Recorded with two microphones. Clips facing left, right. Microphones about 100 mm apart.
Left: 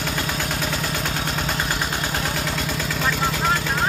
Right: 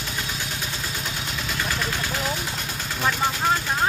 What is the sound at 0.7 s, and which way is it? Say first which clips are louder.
Vehicle: left 6 dB; 60° left (ahead or behind).